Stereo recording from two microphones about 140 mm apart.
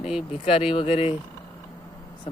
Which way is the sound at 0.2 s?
45° left (ahead or behind).